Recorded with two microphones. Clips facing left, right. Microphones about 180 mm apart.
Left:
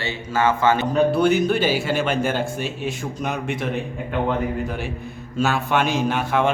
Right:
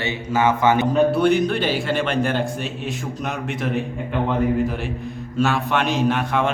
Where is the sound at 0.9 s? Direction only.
Centre (ahead or behind).